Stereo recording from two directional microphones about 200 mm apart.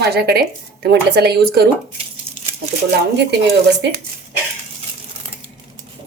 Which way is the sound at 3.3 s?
60° right (ahead or behind).